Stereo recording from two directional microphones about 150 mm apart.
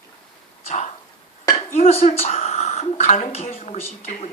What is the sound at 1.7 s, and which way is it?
Speech, 45° left (ahead or behind).